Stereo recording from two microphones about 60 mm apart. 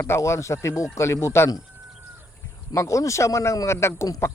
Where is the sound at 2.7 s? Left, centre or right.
Left.